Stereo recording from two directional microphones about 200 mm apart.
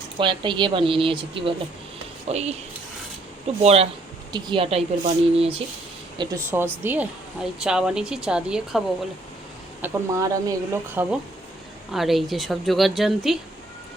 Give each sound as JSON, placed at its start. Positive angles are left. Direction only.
{"t": 0.2, "sound": "speech", "side_deg": -25}
{"t": 6.1, "sound": "a woman's voice", "side_deg": -15}
{"t": 9.8, "sound": "a woman's voice", "side_deg": -15}